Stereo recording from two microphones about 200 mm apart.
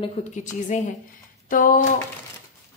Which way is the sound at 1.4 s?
45° left (ahead or behind).